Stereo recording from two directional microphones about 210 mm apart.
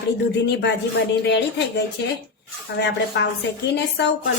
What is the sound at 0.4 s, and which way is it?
Speech, 55° left (ahead or behind).